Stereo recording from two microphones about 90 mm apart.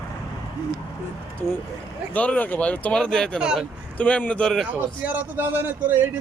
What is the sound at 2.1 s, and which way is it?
Speech, 15° left (ahead or behind).